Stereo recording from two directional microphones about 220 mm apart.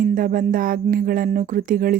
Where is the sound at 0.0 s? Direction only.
40° right (ahead or behind).